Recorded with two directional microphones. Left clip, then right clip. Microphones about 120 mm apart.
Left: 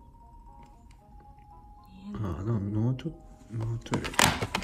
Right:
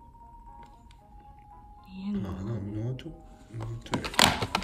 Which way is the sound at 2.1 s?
20° left (ahead or behind).